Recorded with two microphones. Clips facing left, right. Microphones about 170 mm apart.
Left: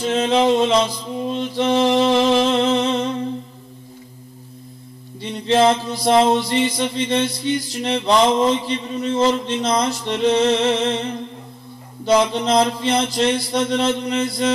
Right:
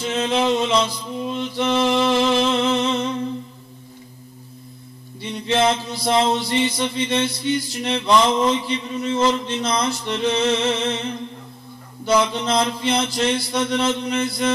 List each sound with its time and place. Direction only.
0.0 s mantra: 35° left (ahead or behind)
5.5 s mantra: 35° left (ahead or behind)